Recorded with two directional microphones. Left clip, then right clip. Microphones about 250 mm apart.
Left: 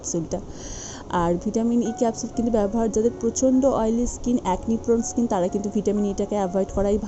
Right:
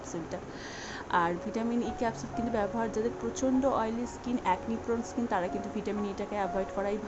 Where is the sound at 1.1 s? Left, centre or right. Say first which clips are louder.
Left 6 dB; centre.